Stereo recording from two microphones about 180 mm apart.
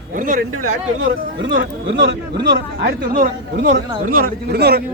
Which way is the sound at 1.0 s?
90° right.